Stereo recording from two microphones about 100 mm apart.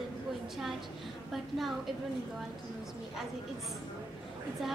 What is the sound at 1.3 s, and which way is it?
Speech, centre (ahead or behind).